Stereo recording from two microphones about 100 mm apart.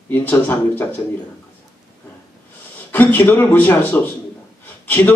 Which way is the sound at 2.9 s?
20° left (ahead or behind).